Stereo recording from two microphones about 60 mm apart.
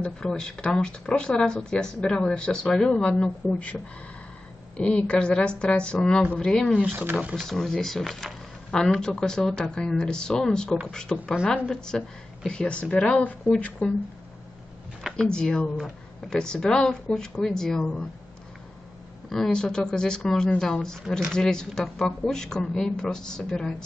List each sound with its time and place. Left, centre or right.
0.0 s speech: centre
6.8 s speech: right
7.3 s speech: centre; by 13.9 s left
15.1 s speech: centre
19.2 s speech: centre